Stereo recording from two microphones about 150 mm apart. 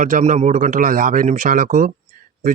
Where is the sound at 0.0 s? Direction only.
55° right (ahead or behind).